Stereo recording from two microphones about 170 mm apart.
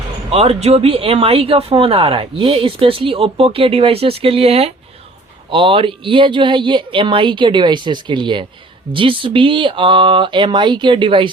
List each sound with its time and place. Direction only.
0.3 s speech: 35° right (ahead or behind)